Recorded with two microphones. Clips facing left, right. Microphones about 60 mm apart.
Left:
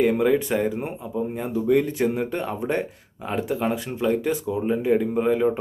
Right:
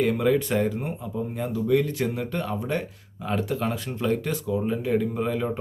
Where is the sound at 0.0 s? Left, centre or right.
Centre.